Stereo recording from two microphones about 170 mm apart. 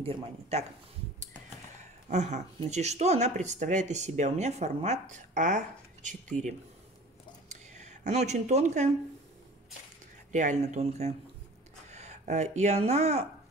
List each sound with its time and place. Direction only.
0.0 s speech: 35° right (ahead or behind)
2.0 s speech: 45° right (ahead or behind)
7.4 s a sound: 45° right (ahead or behind)
10.3 s speech: 45° right (ahead or behind)